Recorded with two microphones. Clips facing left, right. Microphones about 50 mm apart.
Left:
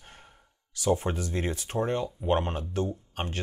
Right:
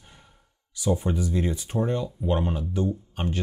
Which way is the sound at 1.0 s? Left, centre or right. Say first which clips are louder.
Right 4 dB; left.